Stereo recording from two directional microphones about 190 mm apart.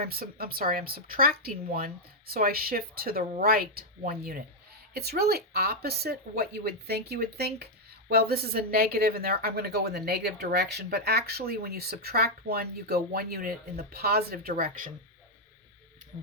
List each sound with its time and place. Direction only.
0.0 s a woman's voice: 50° right (ahead or behind)